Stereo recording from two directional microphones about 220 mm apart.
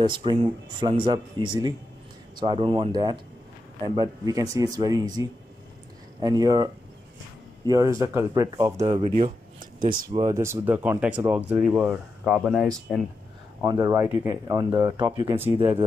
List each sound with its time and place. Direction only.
0.0 s speech: 20° right (ahead or behind)
8.7 s speech: 30° right (ahead or behind)
10.1 s speech: 15° right (ahead or behind); by 13.0 s centre (ahead or behind)
13.6 s speech: 15° right (ahead or behind)